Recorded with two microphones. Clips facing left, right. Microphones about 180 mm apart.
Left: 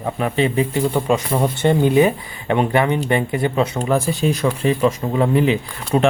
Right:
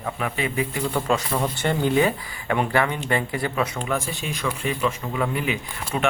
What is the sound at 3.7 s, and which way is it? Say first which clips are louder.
Speech: left 8 dB; 35° left (ahead or behind).